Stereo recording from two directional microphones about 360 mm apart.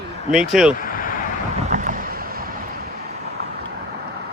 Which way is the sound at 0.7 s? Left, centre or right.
Left.